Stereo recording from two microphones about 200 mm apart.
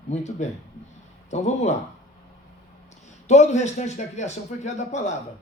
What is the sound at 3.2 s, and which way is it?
A man's voice, 35° left (ahead or behind).